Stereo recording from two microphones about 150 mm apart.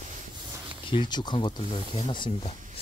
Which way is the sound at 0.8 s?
30° left (ahead or behind).